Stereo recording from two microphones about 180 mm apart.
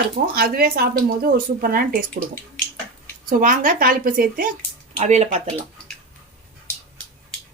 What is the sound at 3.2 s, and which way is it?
Dishes, 50° right (ahead or behind).